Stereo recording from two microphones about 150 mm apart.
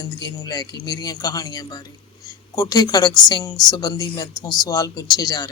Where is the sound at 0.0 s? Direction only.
25° left (ahead or behind).